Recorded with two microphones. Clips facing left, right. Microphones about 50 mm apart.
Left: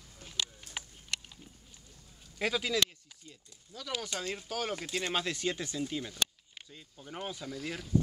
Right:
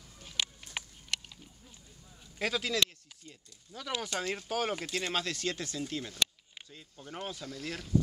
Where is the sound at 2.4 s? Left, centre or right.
Centre.